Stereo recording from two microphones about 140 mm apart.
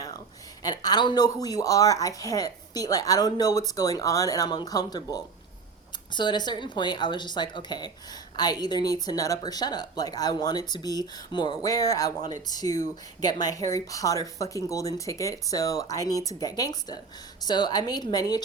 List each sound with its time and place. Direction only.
0.6 s a woman's voice: 25° left (ahead or behind)